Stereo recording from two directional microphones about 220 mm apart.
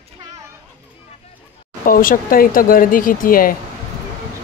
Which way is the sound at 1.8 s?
40° left (ahead or behind).